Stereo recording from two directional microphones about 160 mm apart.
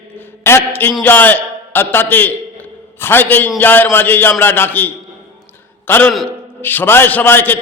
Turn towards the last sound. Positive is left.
turn(degrees=10)  # may be behind; listen again after turning